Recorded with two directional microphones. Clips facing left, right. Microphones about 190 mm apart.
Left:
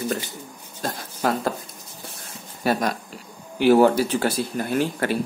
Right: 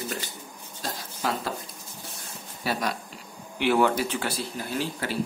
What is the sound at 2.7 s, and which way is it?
Speech, 50° left (ahead or behind).